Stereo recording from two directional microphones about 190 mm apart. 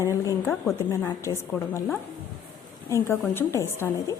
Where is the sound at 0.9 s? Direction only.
15° left (ahead or behind).